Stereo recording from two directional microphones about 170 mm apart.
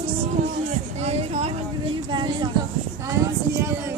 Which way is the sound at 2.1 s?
30° right (ahead or behind).